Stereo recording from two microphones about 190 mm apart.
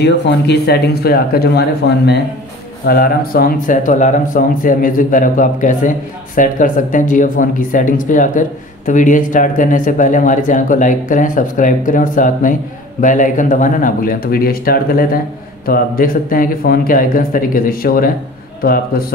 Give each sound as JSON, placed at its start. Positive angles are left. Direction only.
{"t": 0.0, "sound": "speech", "side_deg": 65}